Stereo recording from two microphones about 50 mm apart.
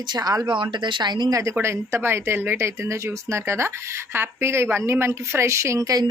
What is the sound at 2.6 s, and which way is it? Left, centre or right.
Speech, right.